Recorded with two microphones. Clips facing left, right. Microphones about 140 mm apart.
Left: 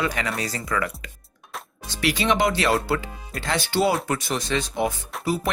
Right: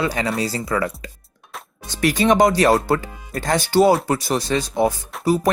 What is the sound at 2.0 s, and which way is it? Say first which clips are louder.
Speech: right 6 dB; 45° right (ahead or behind).